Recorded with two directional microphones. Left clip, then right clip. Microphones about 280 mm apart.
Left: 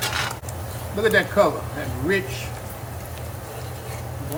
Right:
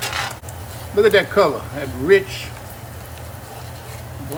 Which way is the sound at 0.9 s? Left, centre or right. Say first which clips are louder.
Right 4 dB; right.